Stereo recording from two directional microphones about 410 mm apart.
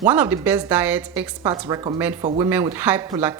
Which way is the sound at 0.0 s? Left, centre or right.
Centre.